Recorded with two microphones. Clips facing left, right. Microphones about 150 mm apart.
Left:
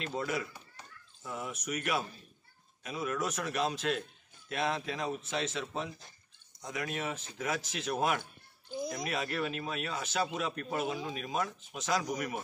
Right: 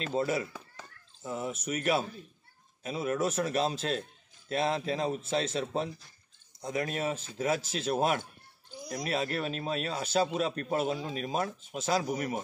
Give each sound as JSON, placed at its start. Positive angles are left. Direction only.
{"t": 0.1, "sound": "a man's voice", "side_deg": -30}